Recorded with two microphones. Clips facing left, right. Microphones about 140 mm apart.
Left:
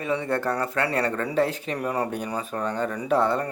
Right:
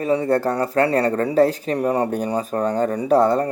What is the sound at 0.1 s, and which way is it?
Speech, 40° right (ahead or behind).